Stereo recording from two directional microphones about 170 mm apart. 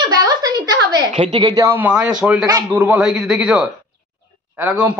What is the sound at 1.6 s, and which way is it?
A man's voice, 10° right (ahead or behind).